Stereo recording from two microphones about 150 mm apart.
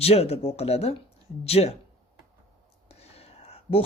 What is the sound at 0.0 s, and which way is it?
Speech, 45° left (ahead or behind).